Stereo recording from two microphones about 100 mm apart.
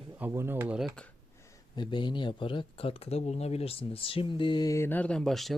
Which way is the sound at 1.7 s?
50° left (ahead or behind).